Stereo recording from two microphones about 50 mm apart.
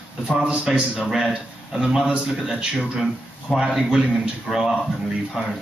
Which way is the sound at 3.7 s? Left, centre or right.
Centre.